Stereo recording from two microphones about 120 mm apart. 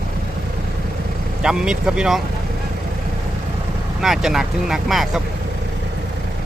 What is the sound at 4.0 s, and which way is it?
Speech, centre (ahead or behind).